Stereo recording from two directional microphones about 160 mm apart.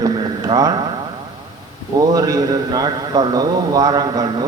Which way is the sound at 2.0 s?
20° right (ahead or behind).